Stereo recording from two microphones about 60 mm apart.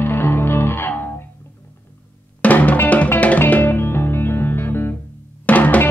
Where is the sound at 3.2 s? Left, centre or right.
Left.